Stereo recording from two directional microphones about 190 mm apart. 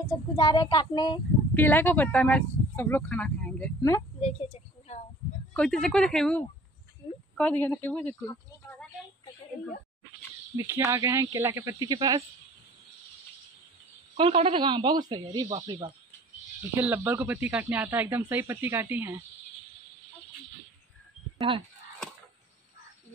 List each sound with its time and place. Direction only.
0.0 s speech: 20° left (ahead or behind)
1.5 s speech: 10° left (ahead or behind)
4.2 s a sound: 35° left (ahead or behind)
5.5 s speech: 5° left (ahead or behind)
8.3 s a sound: 10° left (ahead or behind)
10.5 s speech: 15° right (ahead or behind)
14.1 s speech: 30° right (ahead or behind)
16.7 s speech: 10° right (ahead or behind)
21.4 s speech: 25° right (ahead or behind)